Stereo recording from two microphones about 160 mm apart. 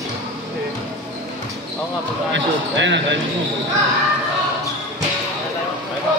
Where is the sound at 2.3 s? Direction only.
90° right.